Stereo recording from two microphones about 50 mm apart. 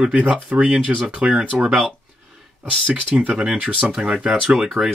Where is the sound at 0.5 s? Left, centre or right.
Right.